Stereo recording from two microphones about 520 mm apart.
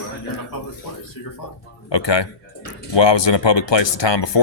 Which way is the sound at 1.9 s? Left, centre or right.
Left.